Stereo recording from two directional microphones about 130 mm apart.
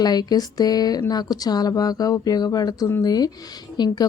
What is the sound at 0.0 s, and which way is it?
Speech, 30° left (ahead or behind).